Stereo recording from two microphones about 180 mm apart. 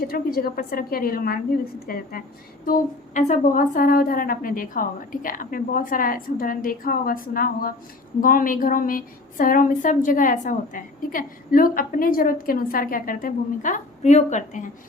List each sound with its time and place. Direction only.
0.1 s a woman's voice: 55° left (ahead or behind)